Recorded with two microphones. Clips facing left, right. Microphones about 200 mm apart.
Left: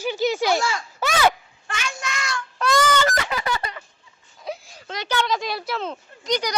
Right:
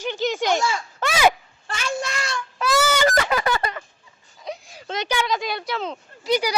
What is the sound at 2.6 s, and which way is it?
Honk, 5° right (ahead or behind).